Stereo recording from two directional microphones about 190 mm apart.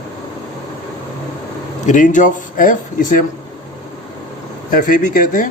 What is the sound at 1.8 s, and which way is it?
Speech, 40° left (ahead or behind).